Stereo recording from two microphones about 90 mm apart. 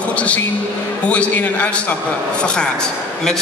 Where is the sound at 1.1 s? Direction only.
15° left (ahead or behind).